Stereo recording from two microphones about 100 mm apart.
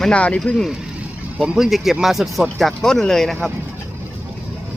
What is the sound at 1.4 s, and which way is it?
Speech, 5° right (ahead or behind).